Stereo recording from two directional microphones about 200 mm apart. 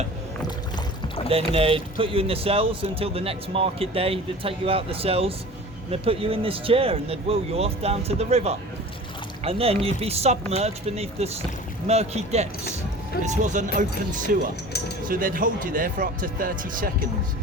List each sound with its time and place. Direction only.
1.0 s rowboat: 30° left (ahead or behind)
1.3 s speech: 30° right (ahead or behind); by 16.9 s 45° right (ahead or behind)